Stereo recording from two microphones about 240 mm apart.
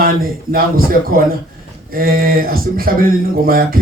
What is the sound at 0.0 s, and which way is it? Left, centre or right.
A man's voice, right.